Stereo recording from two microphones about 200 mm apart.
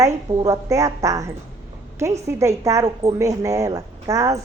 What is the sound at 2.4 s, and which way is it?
A woman's voice, 15° right (ahead or behind).